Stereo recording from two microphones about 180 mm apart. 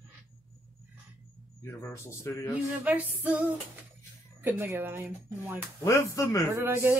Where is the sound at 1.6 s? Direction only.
15° left (ahead or behind).